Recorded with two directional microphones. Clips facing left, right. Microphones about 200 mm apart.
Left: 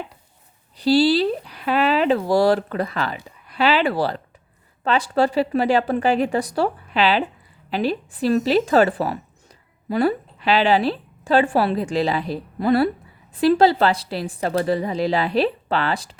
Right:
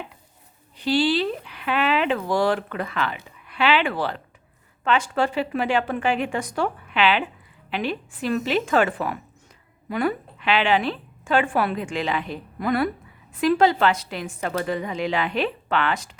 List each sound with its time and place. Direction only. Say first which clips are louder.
0.8 s speech: left 5 dB; 35° left (ahead or behind)